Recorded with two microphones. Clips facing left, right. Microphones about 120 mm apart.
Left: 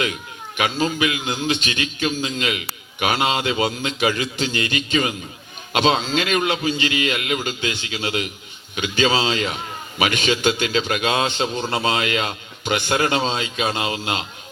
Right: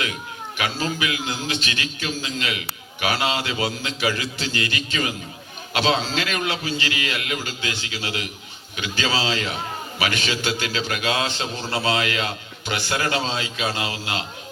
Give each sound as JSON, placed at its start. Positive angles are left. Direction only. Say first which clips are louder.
{"t": 0.5, "sound": "a man's voice", "louder": "left 4 dB", "side_deg": 20}